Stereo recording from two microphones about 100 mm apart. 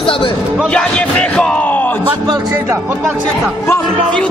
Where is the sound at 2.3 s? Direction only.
40° right (ahead or behind); by 3.2 s 20° right (ahead or behind).